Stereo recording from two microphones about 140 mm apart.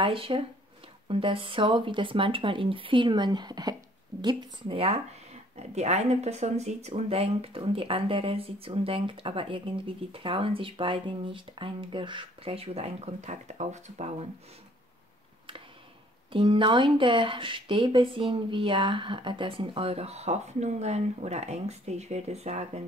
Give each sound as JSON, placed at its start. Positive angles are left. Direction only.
{"t": 0.0, "sound": "speech", "side_deg": -40}
{"t": 16.3, "sound": "speech", "side_deg": -35}